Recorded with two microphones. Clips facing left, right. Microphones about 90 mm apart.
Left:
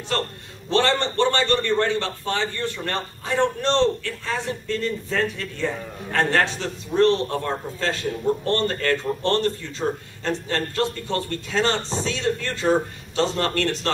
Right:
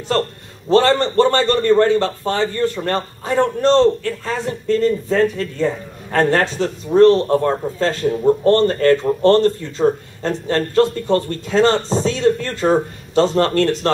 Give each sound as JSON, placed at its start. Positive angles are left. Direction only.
{"t": 0.7, "sound": "a man's voice", "side_deg": -40}